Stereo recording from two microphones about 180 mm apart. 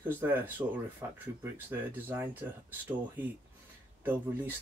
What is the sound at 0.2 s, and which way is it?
Speech, 10° right (ahead or behind).